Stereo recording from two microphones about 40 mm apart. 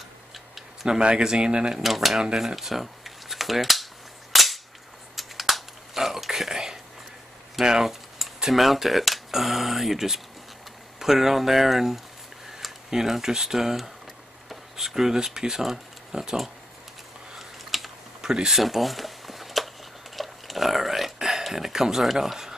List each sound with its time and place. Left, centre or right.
0.8 s speech: centre
1.8 s speech: centre
4.3 s cap gun: centre
5.1 s a sound: centre
7.6 s speech: centre
17.4 s typing: centre
18.2 s speech: centre
18.6 s a sound: centre